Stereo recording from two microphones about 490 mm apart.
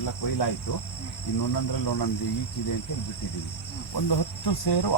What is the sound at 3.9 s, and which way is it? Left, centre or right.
Speech, left.